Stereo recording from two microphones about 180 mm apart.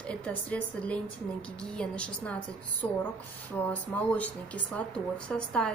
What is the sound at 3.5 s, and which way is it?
Speech, 10° left (ahead or behind).